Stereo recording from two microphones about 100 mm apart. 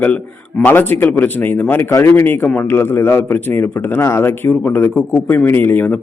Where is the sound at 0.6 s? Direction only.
20° left (ahead or behind).